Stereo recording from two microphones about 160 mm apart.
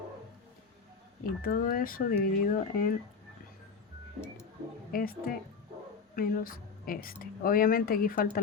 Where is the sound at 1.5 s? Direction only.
60° left (ahead or behind).